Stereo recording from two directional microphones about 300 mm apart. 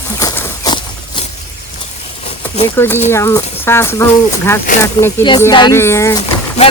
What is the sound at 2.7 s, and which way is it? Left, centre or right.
Speech, centre.